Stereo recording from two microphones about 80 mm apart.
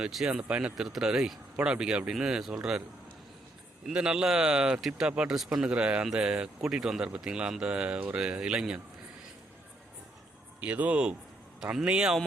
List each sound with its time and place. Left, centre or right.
0.0 s speech: centre
0.3 s speech: centre
3.8 s speech: centre
10.6 s speech: centre